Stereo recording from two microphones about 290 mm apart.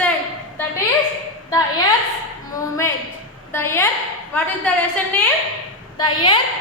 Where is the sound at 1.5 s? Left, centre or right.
Centre.